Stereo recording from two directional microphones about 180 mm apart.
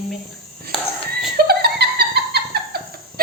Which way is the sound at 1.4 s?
60° right (ahead or behind).